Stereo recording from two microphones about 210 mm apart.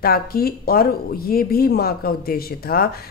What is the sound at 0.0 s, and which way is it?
Speech, 45° left (ahead or behind).